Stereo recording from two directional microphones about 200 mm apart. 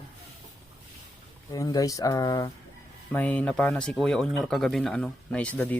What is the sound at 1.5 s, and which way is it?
Speech, 20° left (ahead or behind).